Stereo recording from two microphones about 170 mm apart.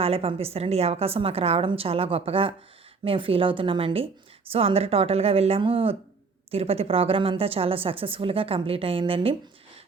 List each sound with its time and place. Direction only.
0.0 s a woman's voice: 35° right (ahead or behind)